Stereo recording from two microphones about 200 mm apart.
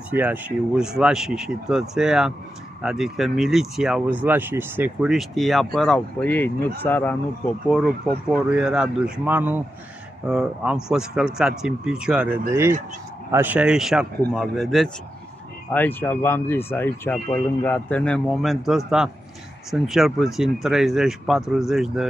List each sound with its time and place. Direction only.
0.1 s speech: 10° right (ahead or behind)